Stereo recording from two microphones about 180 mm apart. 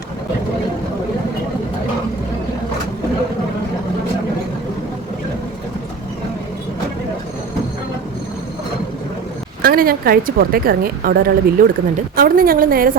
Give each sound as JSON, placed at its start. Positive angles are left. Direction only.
{"t": 9.6, "sound": "a woman's voice", "side_deg": -55}